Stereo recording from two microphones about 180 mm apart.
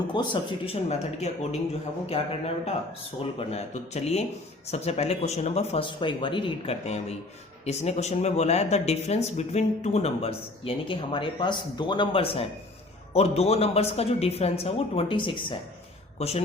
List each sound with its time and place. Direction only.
0.1 s speech: 25° left (ahead or behind)